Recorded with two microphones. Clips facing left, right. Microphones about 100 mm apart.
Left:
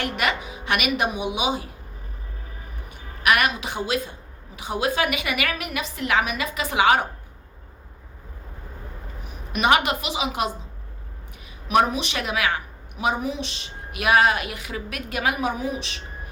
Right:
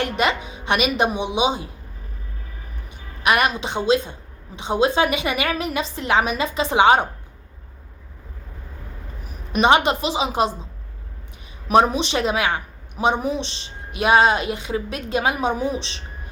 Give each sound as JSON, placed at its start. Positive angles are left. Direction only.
{"t": 0.0, "sound": "a woman's voice", "side_deg": -30}
{"t": 3.2, "sound": "a woman's voice", "side_deg": -30}
{"t": 9.2, "sound": "a woman's voice", "side_deg": -35}
{"t": 11.7, "sound": "a woman's voice", "side_deg": -30}